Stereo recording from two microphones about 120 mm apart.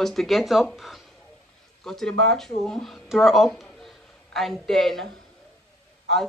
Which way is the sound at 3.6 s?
5° left (ahead or behind).